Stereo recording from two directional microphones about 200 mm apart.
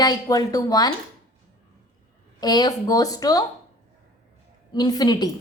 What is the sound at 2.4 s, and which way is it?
A woman's voice, 20° left (ahead or behind).